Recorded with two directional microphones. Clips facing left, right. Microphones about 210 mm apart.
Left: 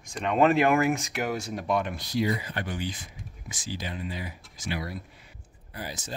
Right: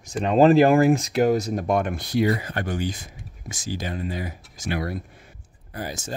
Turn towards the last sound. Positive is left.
turn(degrees=-45)  # may be behind; listen again after turning